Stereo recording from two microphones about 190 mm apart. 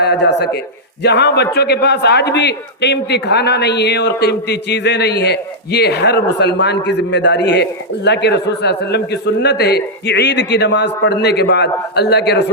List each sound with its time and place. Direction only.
0.0 s speech: 65° left (ahead or behind)